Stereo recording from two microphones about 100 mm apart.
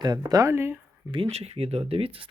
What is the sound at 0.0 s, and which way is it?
Speech, 45° right (ahead or behind).